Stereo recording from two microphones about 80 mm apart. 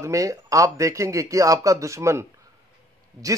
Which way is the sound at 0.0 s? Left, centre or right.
Right.